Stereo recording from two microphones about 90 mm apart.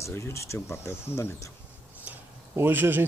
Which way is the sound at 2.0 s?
25° right (ahead or behind).